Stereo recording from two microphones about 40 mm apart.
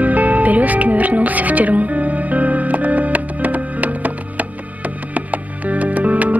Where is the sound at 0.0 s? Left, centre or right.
Right.